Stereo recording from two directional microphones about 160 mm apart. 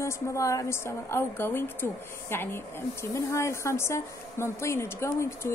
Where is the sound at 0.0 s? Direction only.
20° left (ahead or behind).